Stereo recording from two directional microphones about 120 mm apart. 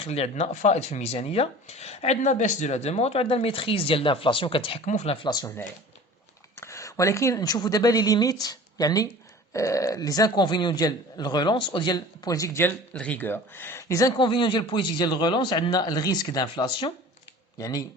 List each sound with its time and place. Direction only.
0.0 s speech: 60° left (ahead or behind)
4.9 s speech: 75° left (ahead or behind)
5.2 s speech: 35° left (ahead or behind)
6.6 s speech: 25° left (ahead or behind)
14.2 s speech: 45° left (ahead or behind)